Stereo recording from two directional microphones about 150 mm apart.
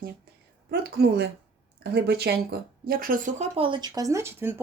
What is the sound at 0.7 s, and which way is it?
A woman's voice, 90° right.